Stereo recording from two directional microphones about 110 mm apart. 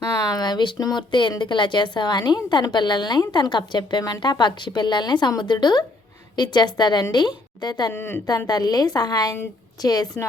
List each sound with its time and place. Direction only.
0.2 s a woman's voice: 35° left (ahead or behind)
7.9 s a woman's voice: 20° left (ahead or behind)
8.4 s a woman's voice: 35° left (ahead or behind)